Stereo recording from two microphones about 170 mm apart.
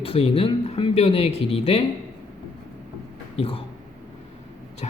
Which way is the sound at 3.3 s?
35° left (ahead or behind).